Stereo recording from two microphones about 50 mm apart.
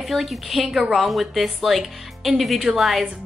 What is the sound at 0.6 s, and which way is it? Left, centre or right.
Speech, centre.